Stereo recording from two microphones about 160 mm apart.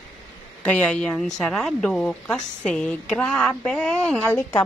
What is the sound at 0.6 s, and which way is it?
A woman's voice, 10° left (ahead or behind).